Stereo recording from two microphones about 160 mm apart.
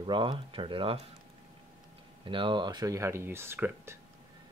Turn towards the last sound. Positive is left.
turn(degrees=-15)  # may be behind; listen again after turning